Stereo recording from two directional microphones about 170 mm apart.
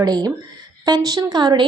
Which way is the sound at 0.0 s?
25° right (ahead or behind).